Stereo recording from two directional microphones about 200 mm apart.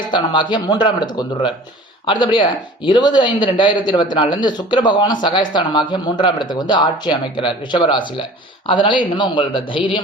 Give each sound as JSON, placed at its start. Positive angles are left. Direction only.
{"t": 0.1, "sound": "speech", "side_deg": 25}